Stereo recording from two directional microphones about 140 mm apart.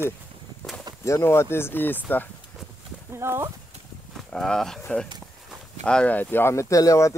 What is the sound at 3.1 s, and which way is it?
Speech, 20° right (ahead or behind).